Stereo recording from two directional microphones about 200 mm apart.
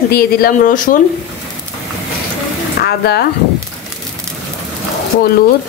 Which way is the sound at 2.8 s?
55° left (ahead or behind).